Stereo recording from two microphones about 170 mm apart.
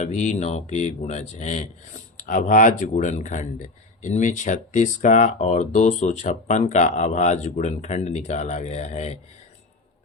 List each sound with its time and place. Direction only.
0.0 s speech: 45° left (ahead or behind)